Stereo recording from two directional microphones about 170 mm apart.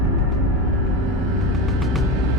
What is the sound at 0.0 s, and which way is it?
Music, centre (ahead or behind).